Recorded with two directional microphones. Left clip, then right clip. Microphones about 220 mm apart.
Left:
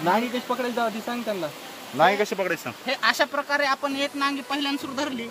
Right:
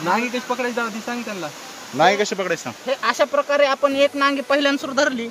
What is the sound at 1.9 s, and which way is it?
Speech, 20° right (ahead or behind).